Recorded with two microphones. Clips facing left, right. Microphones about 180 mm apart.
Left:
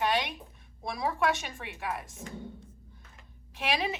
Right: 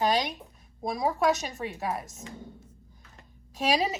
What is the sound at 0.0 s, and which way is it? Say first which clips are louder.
A woman's voice: right 3 dB; 40° right (ahead or behind).